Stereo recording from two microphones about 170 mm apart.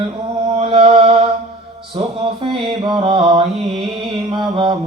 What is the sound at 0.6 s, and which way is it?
Mantra, 30° right (ahead or behind).